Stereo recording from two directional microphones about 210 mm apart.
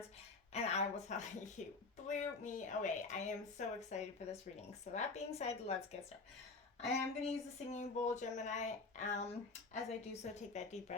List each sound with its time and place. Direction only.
0.5 s a woman's voice: 30° left (ahead or behind)
6.8 s a woman's voice: 30° left (ahead or behind)